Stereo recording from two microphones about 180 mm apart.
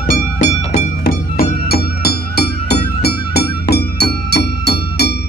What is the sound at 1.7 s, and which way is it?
Music, 60° left (ahead or behind).